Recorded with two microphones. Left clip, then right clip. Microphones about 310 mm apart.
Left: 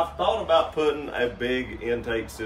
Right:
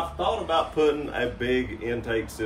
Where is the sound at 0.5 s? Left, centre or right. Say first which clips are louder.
Even; centre.